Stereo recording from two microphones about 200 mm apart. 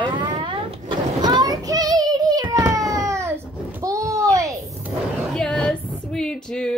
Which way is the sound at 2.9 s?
15° right (ahead or behind).